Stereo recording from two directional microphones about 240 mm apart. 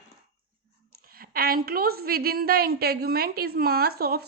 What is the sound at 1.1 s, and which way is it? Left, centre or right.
A woman's voice, right.